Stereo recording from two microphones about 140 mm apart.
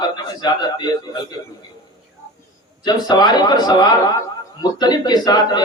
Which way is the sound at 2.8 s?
30° left (ahead or behind).